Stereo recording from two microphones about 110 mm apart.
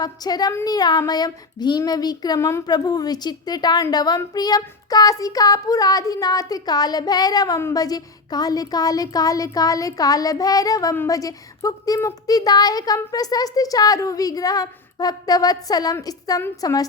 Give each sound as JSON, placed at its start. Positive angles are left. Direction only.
{"t": 0.0, "sound": "child singing", "side_deg": 40}
{"t": 2.6, "sound": "child singing", "side_deg": 40}